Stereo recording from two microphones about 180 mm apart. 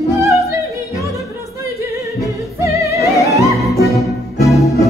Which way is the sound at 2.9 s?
15° right (ahead or behind).